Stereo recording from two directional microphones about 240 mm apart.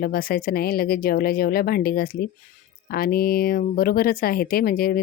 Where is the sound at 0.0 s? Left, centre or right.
Left.